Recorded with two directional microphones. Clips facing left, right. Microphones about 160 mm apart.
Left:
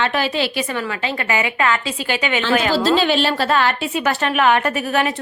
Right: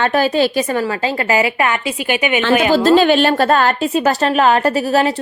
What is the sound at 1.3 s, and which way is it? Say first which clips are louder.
Speech: right 3 dB; 30° right (ahead or behind).